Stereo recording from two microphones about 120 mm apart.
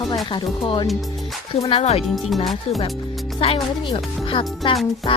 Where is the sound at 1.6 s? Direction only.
60° left (ahead or behind).